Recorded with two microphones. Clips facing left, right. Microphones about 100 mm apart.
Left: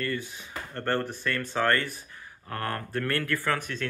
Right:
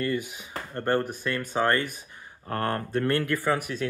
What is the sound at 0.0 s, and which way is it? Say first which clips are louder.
Speech: right 4 dB; 20° right (ahead or behind).